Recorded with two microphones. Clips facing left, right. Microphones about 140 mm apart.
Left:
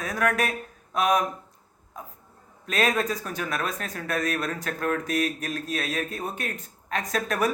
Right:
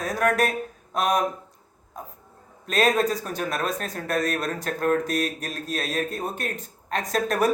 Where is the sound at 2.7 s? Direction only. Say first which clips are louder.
Right 3 dB; 30° right (ahead or behind).